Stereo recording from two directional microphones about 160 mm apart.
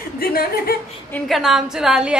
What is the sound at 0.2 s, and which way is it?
Speech, 65° left (ahead or behind).